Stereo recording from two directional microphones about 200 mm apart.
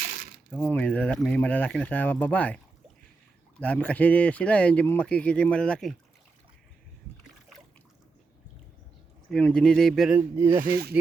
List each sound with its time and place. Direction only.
0.5 s speech: 10° left (ahead or behind)
3.6 s speech: 5° left (ahead or behind)
9.3 s speech: 5° left (ahead or behind); by 10.6 s 15° right (ahead or behind)
10.6 s speech: 50° right (ahead or behind)